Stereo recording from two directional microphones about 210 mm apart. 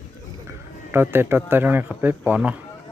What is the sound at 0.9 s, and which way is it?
Speech, 10° right (ahead or behind).